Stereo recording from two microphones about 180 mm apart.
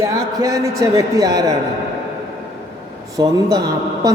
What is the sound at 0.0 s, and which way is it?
A man's voice, 20° right (ahead or behind).